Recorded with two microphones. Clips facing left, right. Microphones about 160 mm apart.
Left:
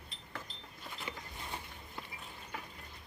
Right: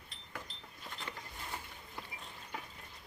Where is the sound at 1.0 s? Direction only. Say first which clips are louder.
Left 2 dB; 15° left (ahead or behind).